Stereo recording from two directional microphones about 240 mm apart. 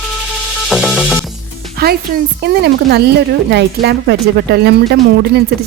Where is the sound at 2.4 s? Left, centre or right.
Right.